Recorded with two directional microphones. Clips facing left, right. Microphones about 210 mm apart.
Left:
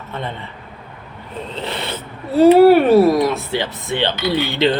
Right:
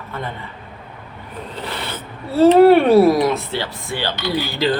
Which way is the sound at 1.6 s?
25° left (ahead or behind).